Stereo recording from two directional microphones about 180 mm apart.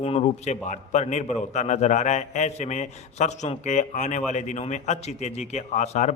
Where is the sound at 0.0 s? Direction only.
35° left (ahead or behind).